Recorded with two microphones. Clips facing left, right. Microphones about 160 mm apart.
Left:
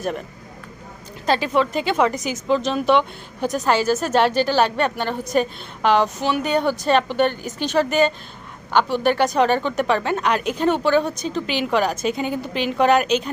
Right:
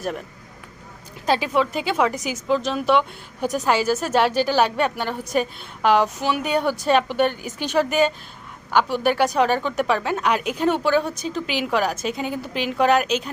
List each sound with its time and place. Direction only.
1.3 s a woman's voice: 10° right (ahead or behind)